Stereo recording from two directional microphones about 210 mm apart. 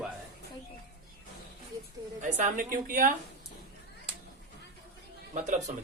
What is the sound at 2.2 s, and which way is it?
Speech, 40° right (ahead or behind).